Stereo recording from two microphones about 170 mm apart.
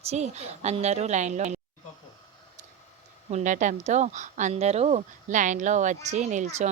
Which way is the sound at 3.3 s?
45° right (ahead or behind).